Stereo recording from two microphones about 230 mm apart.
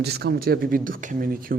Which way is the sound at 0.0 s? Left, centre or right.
Right.